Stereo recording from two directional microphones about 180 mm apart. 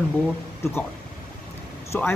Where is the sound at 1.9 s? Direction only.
10° left (ahead or behind).